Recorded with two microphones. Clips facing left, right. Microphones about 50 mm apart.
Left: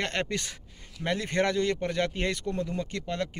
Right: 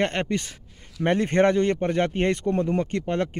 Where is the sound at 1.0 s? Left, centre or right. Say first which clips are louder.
Right 7 dB; right.